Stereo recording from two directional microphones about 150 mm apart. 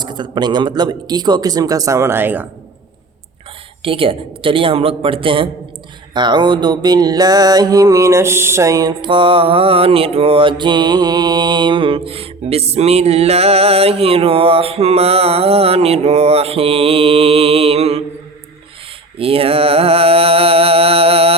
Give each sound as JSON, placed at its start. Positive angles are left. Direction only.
{"t": 0.0, "sound": "a man's voice", "side_deg": -30}
{"t": 3.8, "sound": "music", "side_deg": -35}
{"t": 19.2, "sound": "music", "side_deg": -40}